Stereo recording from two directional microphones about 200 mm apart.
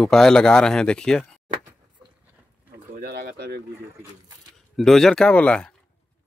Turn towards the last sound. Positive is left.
turn(degrees=5)  # may be behind; listen again after turning